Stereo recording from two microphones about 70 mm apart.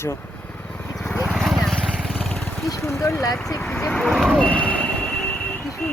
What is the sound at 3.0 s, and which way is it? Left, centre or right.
Speech, left.